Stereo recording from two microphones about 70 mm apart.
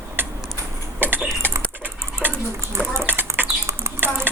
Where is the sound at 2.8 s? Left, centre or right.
Centre.